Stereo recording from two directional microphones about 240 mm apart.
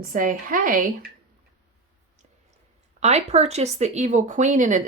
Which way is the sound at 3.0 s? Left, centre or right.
Right.